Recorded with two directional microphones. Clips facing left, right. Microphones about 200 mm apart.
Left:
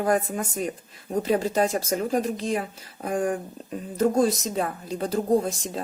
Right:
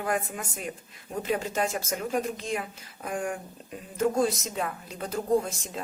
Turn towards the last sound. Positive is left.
turn(degrees=35)  # may be behind; listen again after turning